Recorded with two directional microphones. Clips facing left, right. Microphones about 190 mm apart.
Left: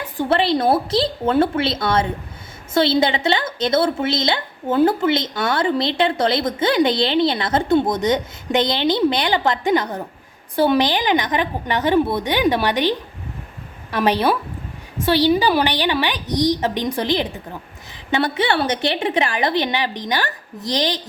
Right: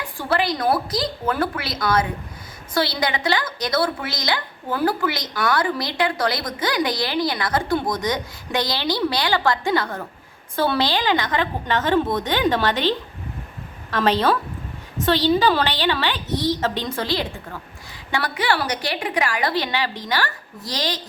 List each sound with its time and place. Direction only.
0.0 s a woman's voice: 20° left (ahead or behind)